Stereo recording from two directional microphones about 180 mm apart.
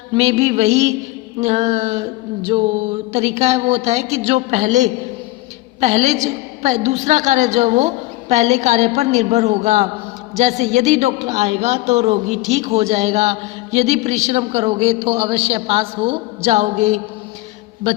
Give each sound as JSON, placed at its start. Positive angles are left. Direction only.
{"t": 0.1, "sound": "a man's voice", "side_deg": -35}